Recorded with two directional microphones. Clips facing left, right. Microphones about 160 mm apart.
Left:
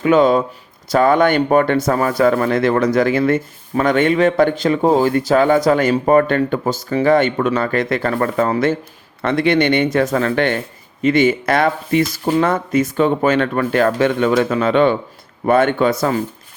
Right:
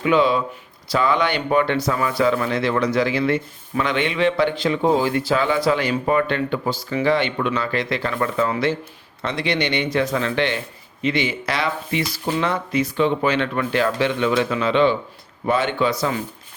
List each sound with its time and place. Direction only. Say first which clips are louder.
0.0 s speech: left 5 dB; 45° left (ahead or behind)